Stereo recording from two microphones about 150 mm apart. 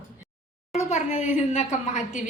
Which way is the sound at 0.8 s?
50° left (ahead or behind).